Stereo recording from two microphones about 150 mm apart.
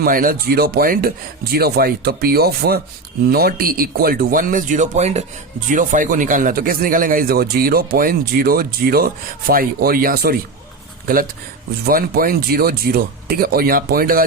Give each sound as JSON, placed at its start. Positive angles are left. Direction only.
{"t": 0.0, "sound": "speech", "side_deg": -70}